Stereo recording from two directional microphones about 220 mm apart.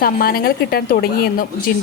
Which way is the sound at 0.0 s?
40° left (ahead or behind).